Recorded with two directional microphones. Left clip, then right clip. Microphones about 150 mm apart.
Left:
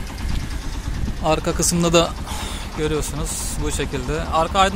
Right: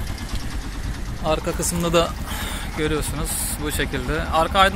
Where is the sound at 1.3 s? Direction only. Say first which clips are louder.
Left 3 dB; 30° left (ahead or behind).